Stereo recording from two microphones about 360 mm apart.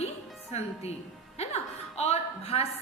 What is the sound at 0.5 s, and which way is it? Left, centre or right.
A woman's voice, centre.